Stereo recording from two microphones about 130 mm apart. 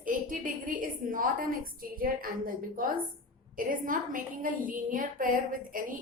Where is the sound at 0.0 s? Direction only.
90° right.